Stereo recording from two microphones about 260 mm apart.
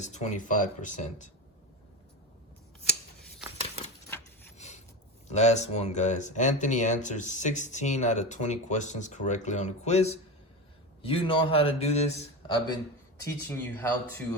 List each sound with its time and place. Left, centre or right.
0.0 s speech: left
4.5 s filing: left
5.3 s speech: left; by 14.2 s centre